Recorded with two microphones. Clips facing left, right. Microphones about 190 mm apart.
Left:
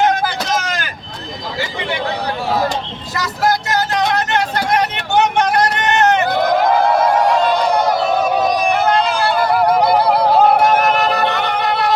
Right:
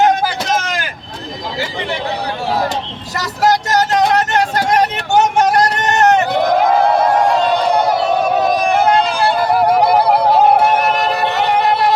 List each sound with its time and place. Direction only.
3.7 s vehicle: 40° right (ahead or behind)